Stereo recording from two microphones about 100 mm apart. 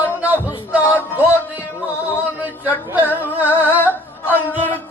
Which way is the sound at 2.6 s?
20° right (ahead or behind).